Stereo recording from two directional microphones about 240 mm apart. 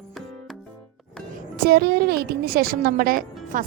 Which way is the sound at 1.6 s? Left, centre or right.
Right.